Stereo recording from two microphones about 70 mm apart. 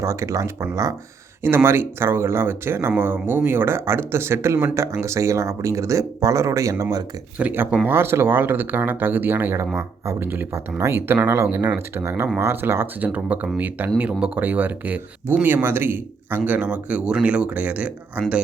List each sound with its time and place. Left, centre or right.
0.0 s speech: right
1.4 s speech: right
7.5 s speech: right
13.1 s speech: right
16.5 s speech: centre